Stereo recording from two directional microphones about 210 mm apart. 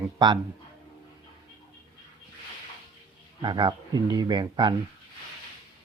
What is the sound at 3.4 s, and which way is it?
Speech, 20° right (ahead or behind).